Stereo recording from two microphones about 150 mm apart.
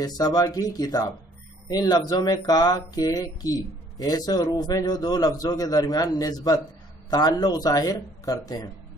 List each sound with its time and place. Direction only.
0.0 s speech: 25° left (ahead or behind)